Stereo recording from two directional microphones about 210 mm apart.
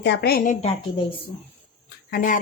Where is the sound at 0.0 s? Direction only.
55° left (ahead or behind); by 1.0 s 30° left (ahead or behind).